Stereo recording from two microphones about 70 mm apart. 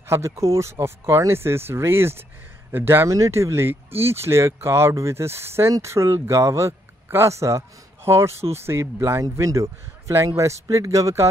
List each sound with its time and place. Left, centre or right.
0.0 s speech: right
3.1 s speech: right
9.2 s a man's voice: right